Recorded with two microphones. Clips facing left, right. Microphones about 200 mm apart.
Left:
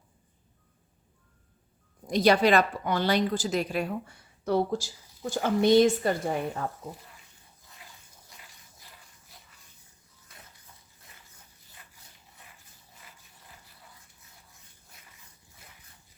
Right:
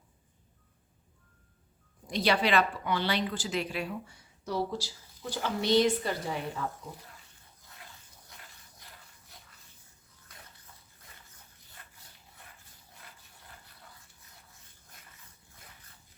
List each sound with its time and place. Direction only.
2.0 s a woman's voice: 45° left (ahead or behind)
13.0 s water: centre (ahead or behind)